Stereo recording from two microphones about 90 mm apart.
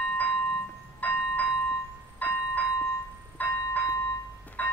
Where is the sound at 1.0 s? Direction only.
15° left (ahead or behind).